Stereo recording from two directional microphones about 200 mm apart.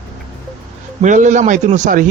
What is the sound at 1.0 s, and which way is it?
Speech, 40° right (ahead or behind).